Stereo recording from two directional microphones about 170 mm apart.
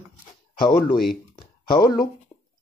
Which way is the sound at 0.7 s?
60° left (ahead or behind).